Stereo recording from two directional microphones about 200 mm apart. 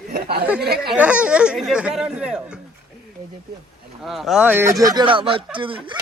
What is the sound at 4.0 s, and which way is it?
Speech, centre (ahead or behind).